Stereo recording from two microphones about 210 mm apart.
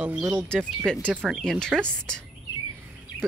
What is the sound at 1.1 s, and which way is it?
Speech, 5° right (ahead or behind).